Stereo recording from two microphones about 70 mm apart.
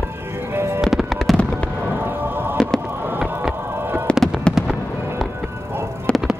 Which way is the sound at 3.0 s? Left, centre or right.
Right.